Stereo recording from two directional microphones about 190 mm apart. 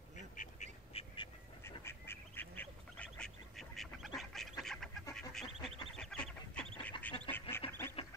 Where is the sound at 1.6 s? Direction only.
15° left (ahead or behind).